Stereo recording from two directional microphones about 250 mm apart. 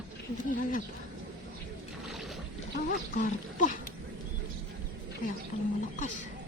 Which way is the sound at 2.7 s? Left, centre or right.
Left.